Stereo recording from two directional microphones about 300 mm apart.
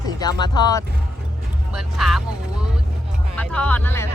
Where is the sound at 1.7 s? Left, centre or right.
Centre.